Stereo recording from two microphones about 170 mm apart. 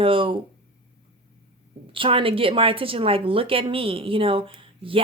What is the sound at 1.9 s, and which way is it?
A woman's voice, 30° right (ahead or behind).